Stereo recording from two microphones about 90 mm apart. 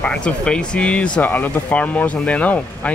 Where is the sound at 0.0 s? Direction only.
10° left (ahead or behind).